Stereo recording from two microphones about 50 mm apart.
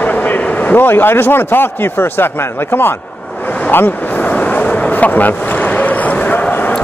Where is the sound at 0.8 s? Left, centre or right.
Left.